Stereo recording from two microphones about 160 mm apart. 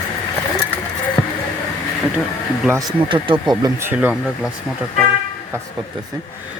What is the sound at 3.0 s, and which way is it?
Speech, 30° right (ahead or behind).